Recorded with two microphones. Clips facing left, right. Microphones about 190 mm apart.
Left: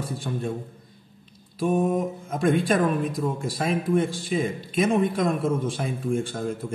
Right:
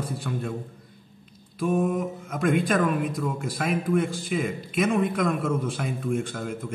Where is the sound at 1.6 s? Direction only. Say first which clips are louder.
Left 2 dB; 30° left (ahead or behind).